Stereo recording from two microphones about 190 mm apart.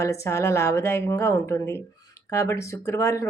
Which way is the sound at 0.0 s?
15° left (ahead or behind).